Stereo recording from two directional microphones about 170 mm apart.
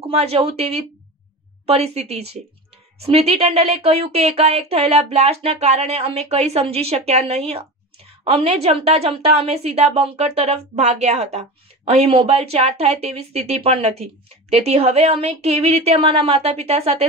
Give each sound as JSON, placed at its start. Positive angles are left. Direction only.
{"t": 0.0, "sound": "a woman's voice", "side_deg": -35}